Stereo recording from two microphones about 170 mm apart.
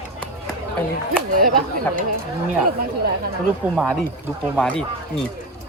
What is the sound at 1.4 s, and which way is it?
Speech, 55° right (ahead or behind).